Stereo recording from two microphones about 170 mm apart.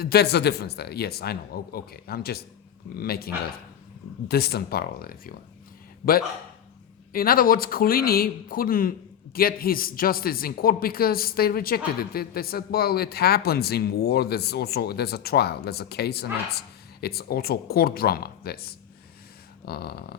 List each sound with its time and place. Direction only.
0.0 s speech: 70° left (ahead or behind)
7.1 s speech: 60° left (ahead or behind)